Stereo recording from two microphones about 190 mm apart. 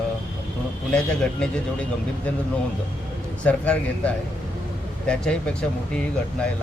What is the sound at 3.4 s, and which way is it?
A man's voice, 5° left (ahead or behind).